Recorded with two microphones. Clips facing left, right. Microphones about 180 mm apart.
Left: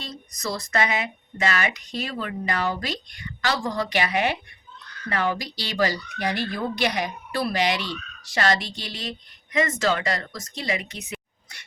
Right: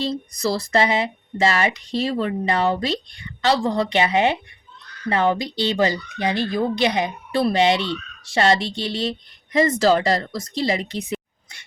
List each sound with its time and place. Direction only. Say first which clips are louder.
0.3 s speech: right 7 dB; 30° right (ahead or behind)